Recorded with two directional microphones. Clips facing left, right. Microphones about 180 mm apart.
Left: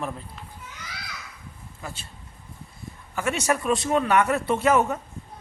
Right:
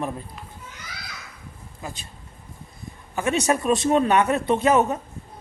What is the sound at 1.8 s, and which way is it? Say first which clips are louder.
Speech: right 2 dB; 15° right (ahead or behind).